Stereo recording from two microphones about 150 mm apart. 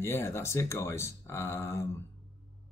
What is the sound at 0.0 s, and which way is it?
Speech, 15° left (ahead or behind).